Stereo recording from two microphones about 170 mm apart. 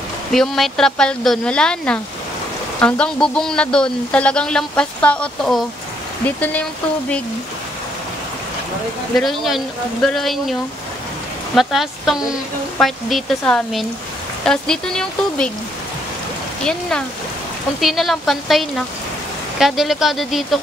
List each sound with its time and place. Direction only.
0.3 s speech: centre (ahead or behind)
9.1 s speech: centre (ahead or behind)
17.7 s speech: centre (ahead or behind)